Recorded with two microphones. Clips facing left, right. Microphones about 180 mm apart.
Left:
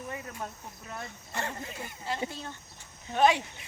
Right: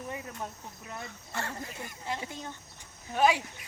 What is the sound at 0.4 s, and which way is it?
Speech, 15° right (ahead or behind).